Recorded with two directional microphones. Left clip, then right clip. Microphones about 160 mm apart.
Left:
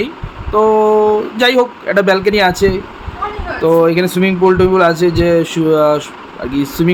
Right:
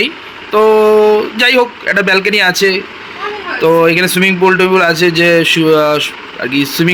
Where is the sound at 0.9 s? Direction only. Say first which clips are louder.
Right 3 dB; 5° left (ahead or behind).